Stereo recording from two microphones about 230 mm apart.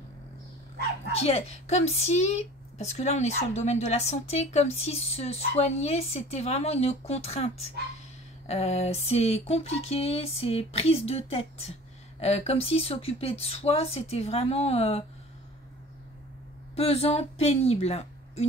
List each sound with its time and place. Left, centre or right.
1.1 s a woman's voice: left
16.7 s a woman's voice: left